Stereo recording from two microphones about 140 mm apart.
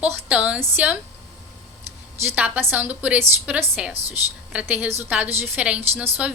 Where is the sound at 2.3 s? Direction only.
10° right (ahead or behind).